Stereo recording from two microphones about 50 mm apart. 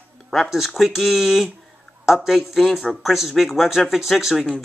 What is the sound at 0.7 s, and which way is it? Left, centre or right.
Speech, centre.